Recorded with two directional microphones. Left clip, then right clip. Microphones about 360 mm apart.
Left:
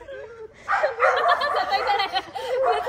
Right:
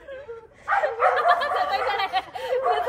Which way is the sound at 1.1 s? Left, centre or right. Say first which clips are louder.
Even; centre.